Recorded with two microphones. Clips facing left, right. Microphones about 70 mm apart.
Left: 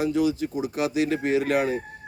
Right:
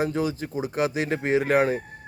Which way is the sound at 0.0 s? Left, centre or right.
Right.